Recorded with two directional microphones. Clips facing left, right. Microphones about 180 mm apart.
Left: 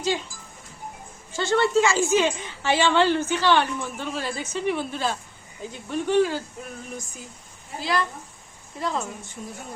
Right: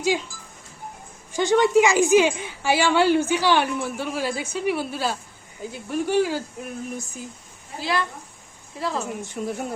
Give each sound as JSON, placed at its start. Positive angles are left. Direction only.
{"t": 1.3, "sound": "a woman's voice", "side_deg": -15}
{"t": 9.4, "sound": "speech", "side_deg": -85}